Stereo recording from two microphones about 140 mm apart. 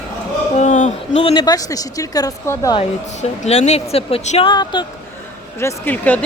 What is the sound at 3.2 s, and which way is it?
Speech, 50° left (ahead or behind).